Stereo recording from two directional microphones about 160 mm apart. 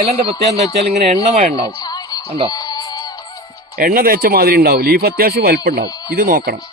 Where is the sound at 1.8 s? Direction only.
25° left (ahead or behind).